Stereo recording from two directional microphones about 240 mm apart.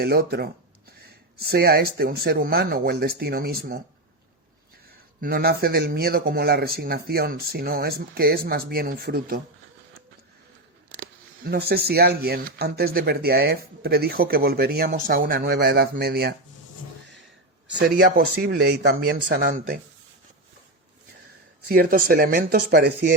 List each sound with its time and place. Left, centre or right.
0.0 s speech: right
5.2 s speech: right
11.0 s speech: right
17.7 s speech: right
21.7 s speech: right